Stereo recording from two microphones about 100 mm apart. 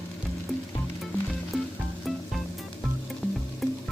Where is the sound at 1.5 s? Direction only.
Centre (ahead or behind).